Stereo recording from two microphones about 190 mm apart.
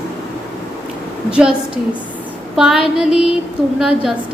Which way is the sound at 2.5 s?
Centre (ahead or behind).